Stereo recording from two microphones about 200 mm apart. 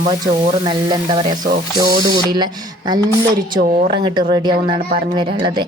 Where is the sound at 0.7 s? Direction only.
20° right (ahead or behind).